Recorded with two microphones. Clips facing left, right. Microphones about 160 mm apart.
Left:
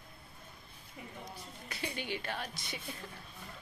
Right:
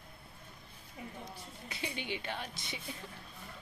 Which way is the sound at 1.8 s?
20° right (ahead or behind).